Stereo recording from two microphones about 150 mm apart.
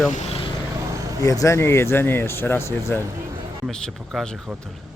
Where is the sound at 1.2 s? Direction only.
20° left (ahead or behind).